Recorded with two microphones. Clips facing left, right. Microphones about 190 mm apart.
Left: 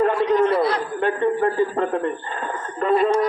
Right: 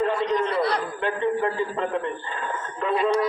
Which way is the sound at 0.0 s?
55° left (ahead or behind).